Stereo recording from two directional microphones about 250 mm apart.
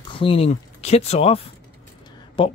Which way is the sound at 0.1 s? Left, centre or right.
Left.